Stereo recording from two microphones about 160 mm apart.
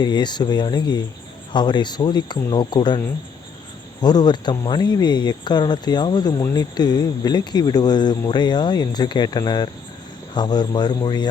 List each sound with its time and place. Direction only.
0.0 s speech: 25° left (ahead or behind)
4.0 s speech: 25° left (ahead or behind)